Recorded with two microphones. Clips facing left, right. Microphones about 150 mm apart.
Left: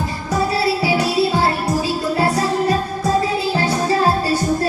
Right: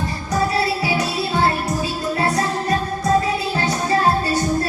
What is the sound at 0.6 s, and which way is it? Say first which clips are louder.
Music: left 3 dB; 30° left (ahead or behind).